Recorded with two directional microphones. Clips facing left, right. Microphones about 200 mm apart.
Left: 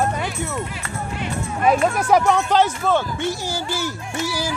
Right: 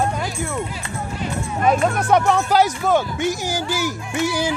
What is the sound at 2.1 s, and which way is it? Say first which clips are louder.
Speech: even; 5° right (ahead or behind).